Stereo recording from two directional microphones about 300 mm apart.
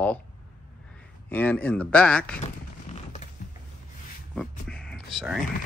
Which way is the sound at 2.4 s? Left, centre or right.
Left.